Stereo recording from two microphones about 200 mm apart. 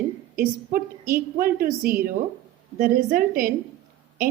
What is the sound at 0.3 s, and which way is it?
A woman's voice, 45° right (ahead or behind).